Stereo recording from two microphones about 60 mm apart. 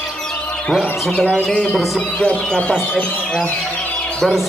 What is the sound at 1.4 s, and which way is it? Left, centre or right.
Music, centre.